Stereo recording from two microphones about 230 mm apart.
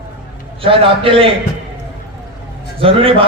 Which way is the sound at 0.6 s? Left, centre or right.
Right.